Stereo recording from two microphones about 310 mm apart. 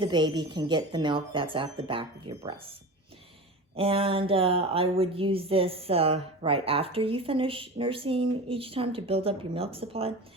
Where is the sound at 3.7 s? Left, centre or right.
Centre.